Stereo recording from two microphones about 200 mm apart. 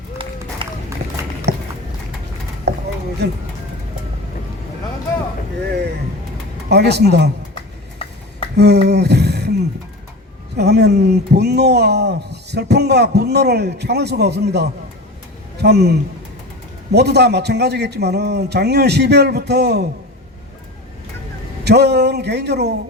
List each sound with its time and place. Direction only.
0.6 s run: 25° right (ahead or behind)
1.5 s walk: 55° right (ahead or behind)
2.7 s a sound: 55° right (ahead or behind)
3.2 s speech: 55° right (ahead or behind)
6.7 s speech: 55° right (ahead or behind)
8.5 s a sound: 55° right (ahead or behind)
10.6 s a man's voice: 55° right (ahead or behind)
21.6 s speech: 55° right (ahead or behind)